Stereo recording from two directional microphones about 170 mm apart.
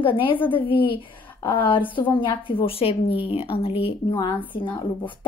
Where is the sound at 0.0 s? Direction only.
30° left (ahead or behind).